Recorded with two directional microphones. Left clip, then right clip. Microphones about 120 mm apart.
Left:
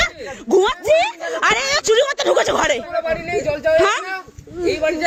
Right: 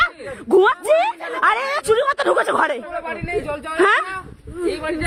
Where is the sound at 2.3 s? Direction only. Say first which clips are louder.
Left 3 dB; 5° right (ahead or behind).